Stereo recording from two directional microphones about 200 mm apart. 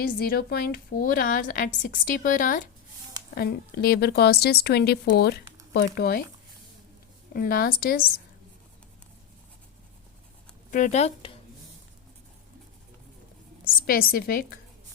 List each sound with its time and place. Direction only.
0.2 s a woman's voice: 50° left (ahead or behind)
7.3 s a woman's voice: 50° left (ahead or behind)
10.7 s speech: 40° left (ahead or behind)
13.8 s a woman's voice: 45° left (ahead or behind)